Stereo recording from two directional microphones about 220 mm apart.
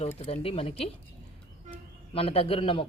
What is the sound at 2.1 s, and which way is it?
Speech, 25° left (ahead or behind).